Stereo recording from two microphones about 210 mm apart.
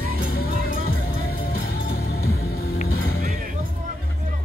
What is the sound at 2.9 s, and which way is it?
Music, 85° left.